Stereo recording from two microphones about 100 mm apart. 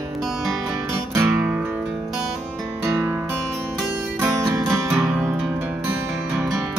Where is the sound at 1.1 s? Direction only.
15° right (ahead or behind).